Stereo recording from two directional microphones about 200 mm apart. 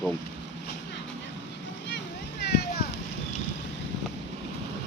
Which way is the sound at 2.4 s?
55° left (ahead or behind).